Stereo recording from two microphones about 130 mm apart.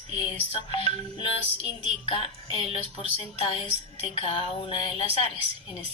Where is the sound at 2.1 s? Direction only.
45° left (ahead or behind).